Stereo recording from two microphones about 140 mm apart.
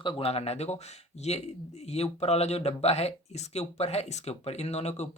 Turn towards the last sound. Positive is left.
turn(degrees=50)  # may be behind; listen again after turning